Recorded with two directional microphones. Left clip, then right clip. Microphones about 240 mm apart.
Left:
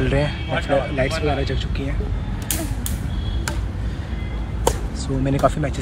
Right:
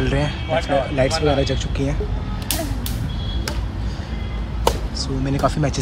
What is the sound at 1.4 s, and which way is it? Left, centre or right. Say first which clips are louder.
Speech: right 4 dB; right.